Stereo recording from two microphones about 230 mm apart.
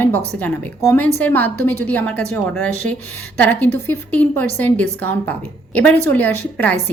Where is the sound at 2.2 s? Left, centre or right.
Right.